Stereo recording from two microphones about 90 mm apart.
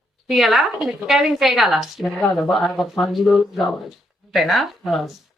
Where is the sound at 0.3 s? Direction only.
Centre (ahead or behind).